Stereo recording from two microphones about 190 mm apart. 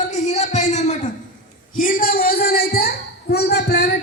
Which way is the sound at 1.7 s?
45° left (ahead or behind).